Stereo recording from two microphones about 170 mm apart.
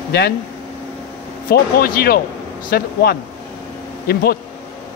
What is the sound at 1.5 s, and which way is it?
Speech, 60° left (ahead or behind).